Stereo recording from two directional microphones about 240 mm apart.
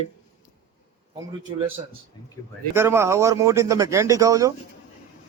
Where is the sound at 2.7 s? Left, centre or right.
Centre.